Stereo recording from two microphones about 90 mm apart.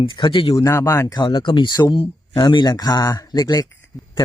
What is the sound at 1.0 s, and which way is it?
Speech, 50° left (ahead or behind).